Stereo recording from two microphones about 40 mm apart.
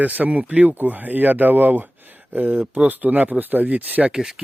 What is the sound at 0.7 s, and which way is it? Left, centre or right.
Speech, right.